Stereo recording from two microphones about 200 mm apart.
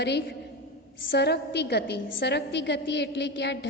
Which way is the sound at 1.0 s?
55° left (ahead or behind).